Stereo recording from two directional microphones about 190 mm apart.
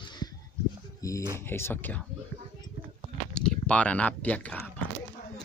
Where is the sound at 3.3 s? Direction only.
5° left (ahead or behind).